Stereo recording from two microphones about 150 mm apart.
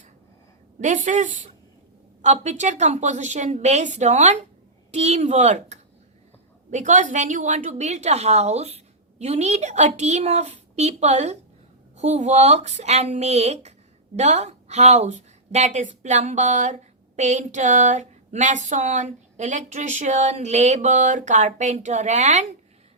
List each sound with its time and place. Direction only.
0.8 s a woman's voice: 55° right (ahead or behind)